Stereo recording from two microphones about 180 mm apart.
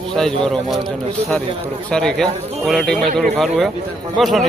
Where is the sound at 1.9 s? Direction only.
5° left (ahead or behind).